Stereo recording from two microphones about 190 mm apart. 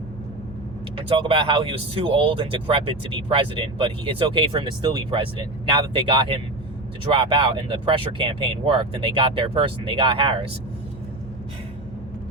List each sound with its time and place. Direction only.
0.9 s speech: 30° right (ahead or behind)